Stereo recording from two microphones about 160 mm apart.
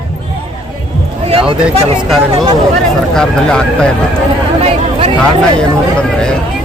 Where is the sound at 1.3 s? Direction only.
35° right (ahead or behind).